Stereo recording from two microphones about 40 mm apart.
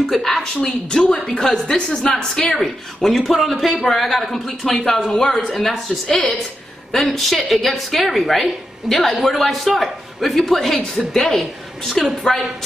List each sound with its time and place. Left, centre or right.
0.1 s speech: centre
2.5 s speech: centre
5.5 s speech: centre